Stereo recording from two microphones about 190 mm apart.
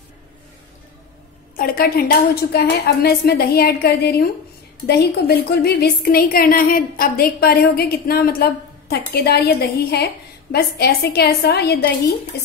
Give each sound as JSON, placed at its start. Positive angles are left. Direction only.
{"t": 1.6, "sound": "speech", "side_deg": 50}